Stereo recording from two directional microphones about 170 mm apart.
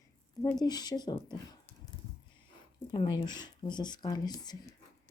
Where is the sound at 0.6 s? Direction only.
25° left (ahead or behind).